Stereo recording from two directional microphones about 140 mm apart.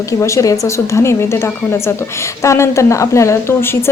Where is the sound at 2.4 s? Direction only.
20° left (ahead or behind).